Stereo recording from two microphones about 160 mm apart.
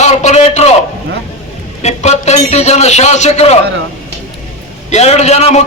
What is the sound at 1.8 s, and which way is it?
A man's voice, 45° left (ahead or behind).